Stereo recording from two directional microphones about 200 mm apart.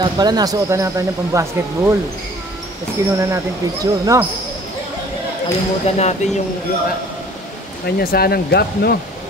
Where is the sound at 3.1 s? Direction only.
15° right (ahead or behind).